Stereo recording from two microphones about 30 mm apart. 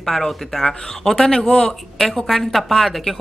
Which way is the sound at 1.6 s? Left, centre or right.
Centre.